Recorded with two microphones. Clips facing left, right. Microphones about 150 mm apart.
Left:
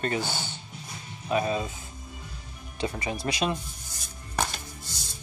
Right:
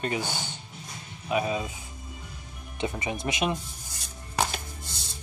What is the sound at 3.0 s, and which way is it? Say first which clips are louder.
Speech: even; 20° right (ahead or behind).